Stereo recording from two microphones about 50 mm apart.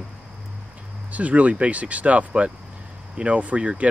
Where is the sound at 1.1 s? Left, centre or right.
Right.